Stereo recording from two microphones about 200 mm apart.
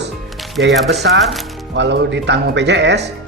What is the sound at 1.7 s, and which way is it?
Speech, 60° right (ahead or behind).